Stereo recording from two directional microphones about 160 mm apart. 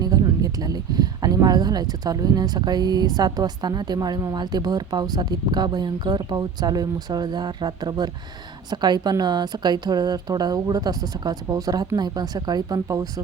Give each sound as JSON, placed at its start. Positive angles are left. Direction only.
{"t": 0.0, "sound": "speech", "side_deg": -25}